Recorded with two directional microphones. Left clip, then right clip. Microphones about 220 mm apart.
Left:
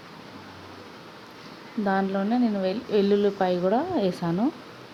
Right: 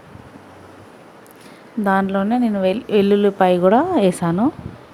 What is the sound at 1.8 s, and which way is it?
Speech, 30° right (ahead or behind).